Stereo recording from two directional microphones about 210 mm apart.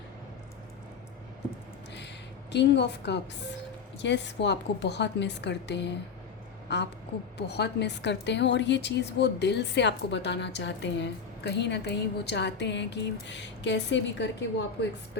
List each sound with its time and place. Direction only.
2.5 s a woman's voice: 55° left (ahead or behind)